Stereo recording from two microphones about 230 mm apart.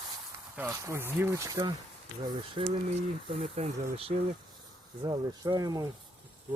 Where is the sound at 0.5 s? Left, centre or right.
Centre.